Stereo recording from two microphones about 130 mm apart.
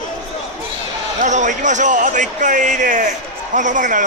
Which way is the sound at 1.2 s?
70° right (ahead or behind).